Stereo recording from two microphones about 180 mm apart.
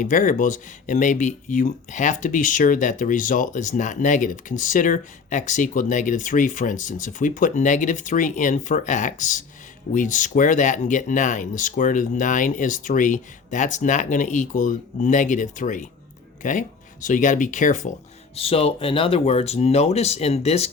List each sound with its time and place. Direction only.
0.0 s speech: 45° left (ahead or behind)
18.3 s speech: 35° left (ahead or behind)